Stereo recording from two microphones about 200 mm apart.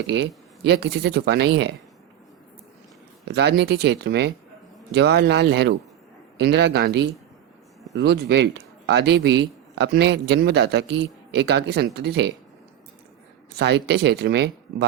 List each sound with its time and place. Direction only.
0.1 s a man's voice: 60° right (ahead or behind)
3.2 s a man's voice: 60° right (ahead or behind)
13.6 s a man's voice: 60° right (ahead or behind)